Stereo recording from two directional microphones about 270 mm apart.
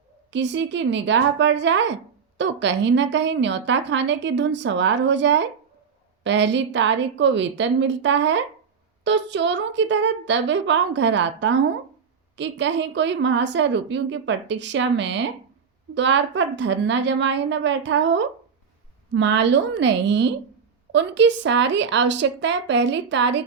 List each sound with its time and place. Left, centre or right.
0.3 s a woman's voice: right